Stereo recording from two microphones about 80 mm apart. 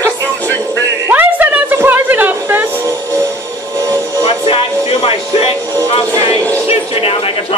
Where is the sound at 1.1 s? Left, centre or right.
Right.